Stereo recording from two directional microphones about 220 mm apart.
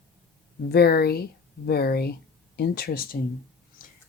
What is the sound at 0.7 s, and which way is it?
Speech, 45° left (ahead or behind).